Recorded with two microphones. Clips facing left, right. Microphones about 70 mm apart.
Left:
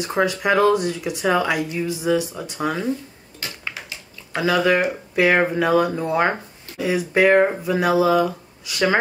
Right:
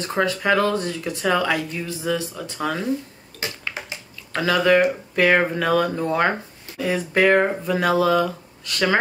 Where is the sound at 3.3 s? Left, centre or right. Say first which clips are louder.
Right 3 dB; left.